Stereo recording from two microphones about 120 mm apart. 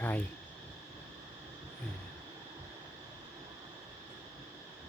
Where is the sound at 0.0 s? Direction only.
15° left (ahead or behind).